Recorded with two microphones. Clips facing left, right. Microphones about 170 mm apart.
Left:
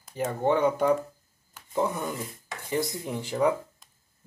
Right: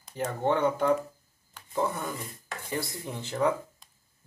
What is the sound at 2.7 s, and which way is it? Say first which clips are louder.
Speech: left 5 dB; 15° left (ahead or behind).